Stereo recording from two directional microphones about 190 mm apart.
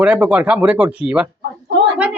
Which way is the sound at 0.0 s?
5° right (ahead or behind).